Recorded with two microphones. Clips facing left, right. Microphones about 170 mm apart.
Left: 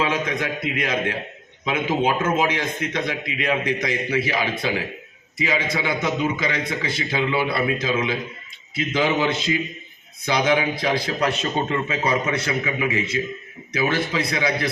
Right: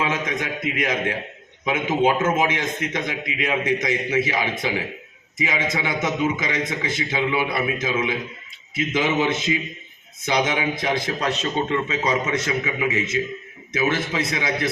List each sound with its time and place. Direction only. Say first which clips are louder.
0.0 s a man's voice: left 2 dB; 20° right (ahead or behind)